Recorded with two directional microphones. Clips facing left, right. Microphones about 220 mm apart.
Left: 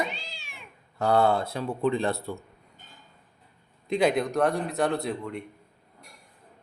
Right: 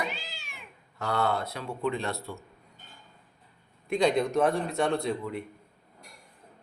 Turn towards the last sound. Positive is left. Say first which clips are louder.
# even
turn(degrees=0)  # may be behind; listen again after turning